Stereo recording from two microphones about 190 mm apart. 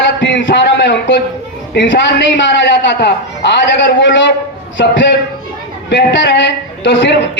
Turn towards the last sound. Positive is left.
turn(degrees=70)  # may be behind; listen again after turning